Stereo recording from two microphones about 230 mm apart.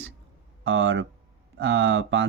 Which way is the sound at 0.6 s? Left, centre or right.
Right.